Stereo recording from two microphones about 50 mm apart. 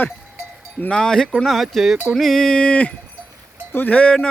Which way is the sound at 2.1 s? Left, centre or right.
Centre.